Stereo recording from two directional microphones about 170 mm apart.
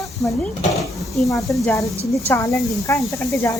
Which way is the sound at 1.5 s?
20° left (ahead or behind).